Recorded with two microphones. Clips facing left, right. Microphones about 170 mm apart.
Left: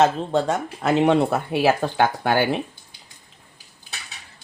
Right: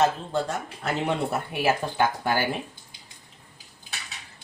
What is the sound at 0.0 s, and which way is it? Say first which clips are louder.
Speech: left 5 dB; 75° left (ahead or behind).